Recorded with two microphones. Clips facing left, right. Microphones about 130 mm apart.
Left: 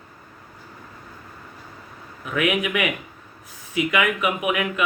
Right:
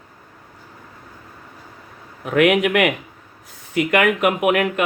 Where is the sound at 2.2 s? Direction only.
75° right (ahead or behind).